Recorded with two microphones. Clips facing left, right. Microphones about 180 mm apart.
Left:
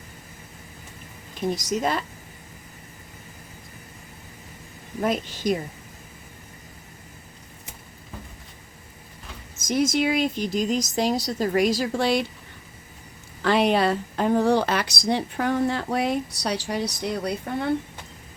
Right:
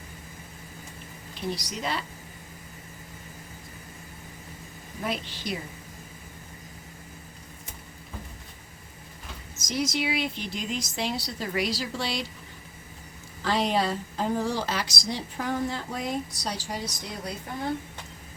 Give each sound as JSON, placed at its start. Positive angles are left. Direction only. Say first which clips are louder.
{"t": 1.5, "sound": "speech", "louder": "left 7 dB", "side_deg": 45}
{"t": 4.9, "sound": "speech", "louder": "left 7 dB", "side_deg": 45}
{"t": 9.6, "sound": "speech", "louder": "left 7 dB", "side_deg": 55}
{"t": 13.4, "sound": "speech", "louder": "left 6 dB", "side_deg": 65}